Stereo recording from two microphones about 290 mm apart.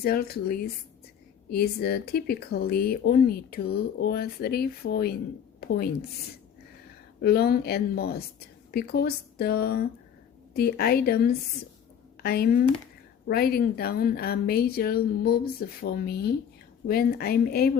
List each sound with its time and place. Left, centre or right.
0.0 s speech: left
7.2 s speech: left